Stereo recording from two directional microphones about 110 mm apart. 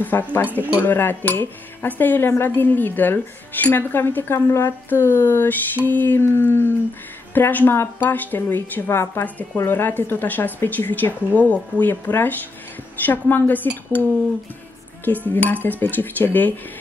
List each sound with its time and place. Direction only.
0.0 s speech: 15° left (ahead or behind)
15.0 s speech: 15° left (ahead or behind)